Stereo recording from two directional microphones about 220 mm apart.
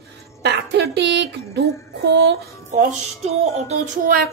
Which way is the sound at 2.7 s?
30° right (ahead or behind).